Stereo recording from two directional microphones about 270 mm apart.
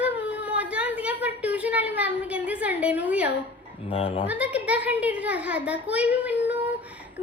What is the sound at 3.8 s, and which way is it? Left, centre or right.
Speech, left.